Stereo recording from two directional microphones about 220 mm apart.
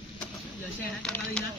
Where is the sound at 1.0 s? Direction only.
5° left (ahead or behind).